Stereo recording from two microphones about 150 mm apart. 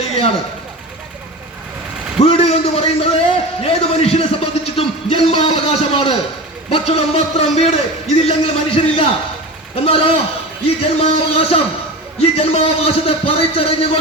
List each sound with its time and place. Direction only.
2.2 s a man's voice: 40° left (ahead or behind)